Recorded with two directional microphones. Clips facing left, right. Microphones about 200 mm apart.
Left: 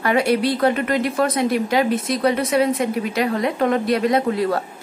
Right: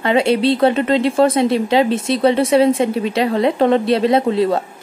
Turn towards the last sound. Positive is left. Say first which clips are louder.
# right 4 dB
turn(degrees=-25)  # may be behind; listen again after turning